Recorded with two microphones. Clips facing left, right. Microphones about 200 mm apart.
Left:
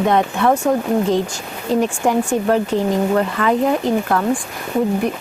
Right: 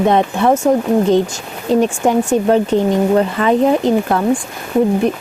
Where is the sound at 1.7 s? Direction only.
20° right (ahead or behind).